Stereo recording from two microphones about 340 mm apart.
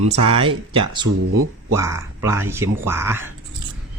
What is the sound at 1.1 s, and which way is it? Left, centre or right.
Speech, right.